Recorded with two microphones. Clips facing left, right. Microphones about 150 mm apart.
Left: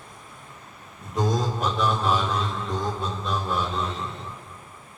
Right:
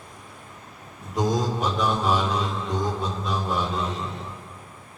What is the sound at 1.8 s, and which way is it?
Mantra, 5° right (ahead or behind).